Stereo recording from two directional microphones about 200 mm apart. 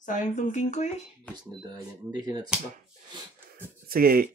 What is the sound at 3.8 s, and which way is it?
Speech, 50° right (ahead or behind).